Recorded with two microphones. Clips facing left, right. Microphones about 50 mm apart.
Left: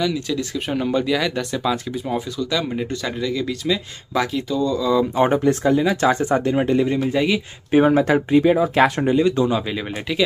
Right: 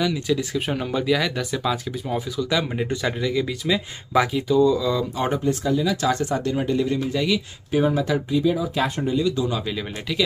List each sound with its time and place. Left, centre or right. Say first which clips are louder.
0.0 s speech: even; centre
2.5 s speech: even; centre
5.1 s a man's voice: left 6 dB; left
7.1 s a man's voice: left 3 dB; left
7.7 s speech: left 6 dB; left
9.1 s speech: left 5 dB; left